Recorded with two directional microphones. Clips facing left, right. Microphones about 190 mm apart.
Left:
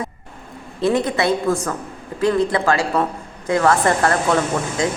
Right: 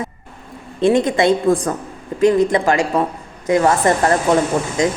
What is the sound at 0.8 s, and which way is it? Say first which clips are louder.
A woman's voice: right 4 dB; 25° right (ahead or behind).